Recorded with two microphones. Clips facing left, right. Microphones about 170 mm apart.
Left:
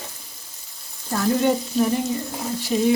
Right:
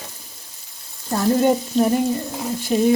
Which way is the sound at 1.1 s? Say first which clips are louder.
Right 3 dB; 40° right (ahead or behind).